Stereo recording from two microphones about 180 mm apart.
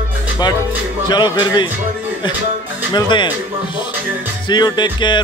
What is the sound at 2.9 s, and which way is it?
Speech, 25° left (ahead or behind).